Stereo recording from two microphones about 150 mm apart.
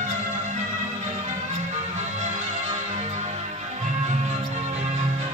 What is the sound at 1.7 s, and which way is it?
Music, 50° right (ahead or behind).